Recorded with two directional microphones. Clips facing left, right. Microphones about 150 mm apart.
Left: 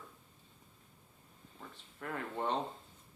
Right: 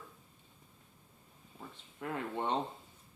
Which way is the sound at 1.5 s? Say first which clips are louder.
Right 3 dB; 15° right (ahead or behind).